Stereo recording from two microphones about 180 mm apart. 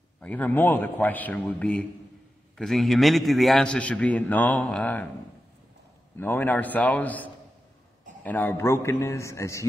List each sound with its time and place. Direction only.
0.2 s a man's voice: 10° left (ahead or behind)
6.1 s a man's voice: 10° left (ahead or behind)